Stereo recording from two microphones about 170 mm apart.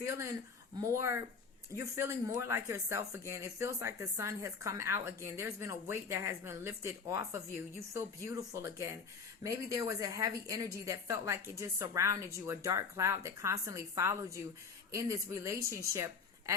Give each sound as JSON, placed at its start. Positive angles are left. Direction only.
{"t": 0.0, "sound": "a woman's voice", "side_deg": -15}